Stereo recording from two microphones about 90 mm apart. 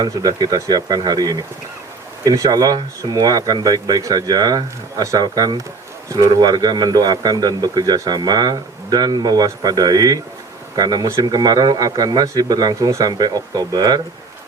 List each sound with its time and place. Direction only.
0.0 s a man's voice: 45° right (ahead or behind)